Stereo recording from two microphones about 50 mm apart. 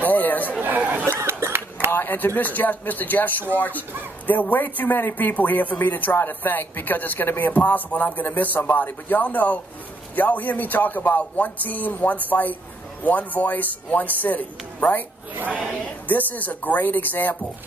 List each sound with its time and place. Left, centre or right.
0.0 s chatter: left
0.5 s speech: right
1.2 s a sound: right
1.9 s a man's voice: left
15.3 s speech: right
16.1 s a man's voice: left